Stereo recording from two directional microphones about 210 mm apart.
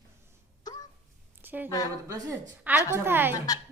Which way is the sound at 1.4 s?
10° right (ahead or behind).